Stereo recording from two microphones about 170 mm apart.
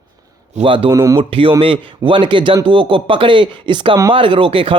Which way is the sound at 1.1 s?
30° right (ahead or behind).